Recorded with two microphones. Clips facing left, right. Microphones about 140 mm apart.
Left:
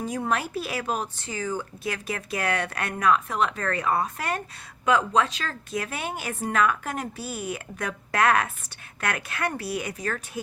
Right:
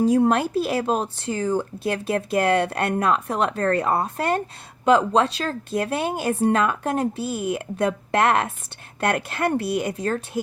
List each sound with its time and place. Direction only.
0.0 s a woman's voice: 30° right (ahead or behind)